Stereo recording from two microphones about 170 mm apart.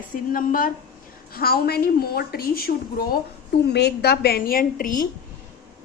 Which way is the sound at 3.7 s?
75° left (ahead or behind).